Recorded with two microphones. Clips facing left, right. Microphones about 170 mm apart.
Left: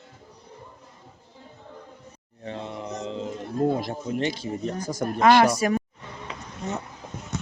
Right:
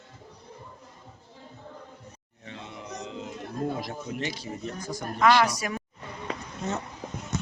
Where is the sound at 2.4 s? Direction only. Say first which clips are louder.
Left 7 dB; 45° left (ahead or behind).